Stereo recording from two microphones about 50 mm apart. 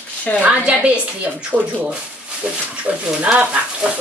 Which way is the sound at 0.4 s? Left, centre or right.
Right.